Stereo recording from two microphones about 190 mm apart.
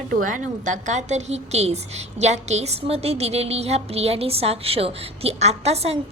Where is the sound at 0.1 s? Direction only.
45° right (ahead or behind).